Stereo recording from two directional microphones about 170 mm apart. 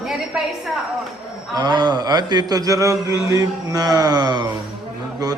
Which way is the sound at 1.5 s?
25° right (ahead or behind).